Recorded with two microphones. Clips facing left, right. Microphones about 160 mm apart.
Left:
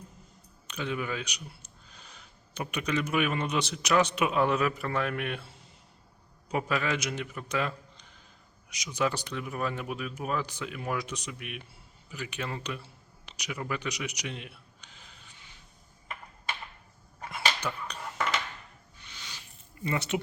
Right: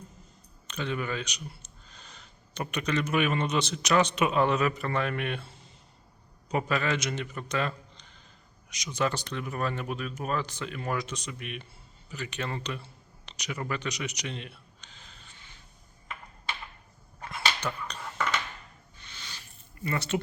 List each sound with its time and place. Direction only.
0.7 s speech: 5° left (ahead or behind)
6.5 s speech: 5° left (ahead or behind)
13.2 s a sound: 10° left (ahead or behind)
17.2 s dog: 10° left (ahead or behind)
18.9 s a sound: 10° left (ahead or behind)
19.8 s speech: 20° left (ahead or behind)